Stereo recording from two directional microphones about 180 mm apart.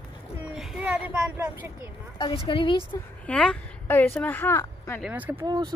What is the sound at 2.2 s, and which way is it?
Speech, 30° left (ahead or behind).